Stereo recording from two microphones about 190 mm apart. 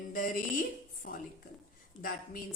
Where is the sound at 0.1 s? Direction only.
45° left (ahead or behind).